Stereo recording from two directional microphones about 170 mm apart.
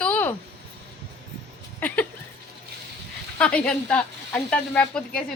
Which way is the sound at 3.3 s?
5° left (ahead or behind).